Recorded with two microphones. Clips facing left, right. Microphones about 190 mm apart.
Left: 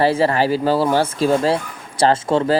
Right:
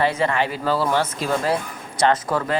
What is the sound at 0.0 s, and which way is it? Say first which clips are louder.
A man's voice: left 5 dB; 30° left (ahead or behind).